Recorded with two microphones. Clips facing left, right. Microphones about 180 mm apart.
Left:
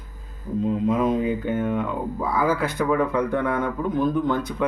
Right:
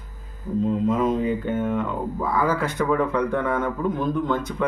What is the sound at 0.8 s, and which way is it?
Speech, centre (ahead or behind).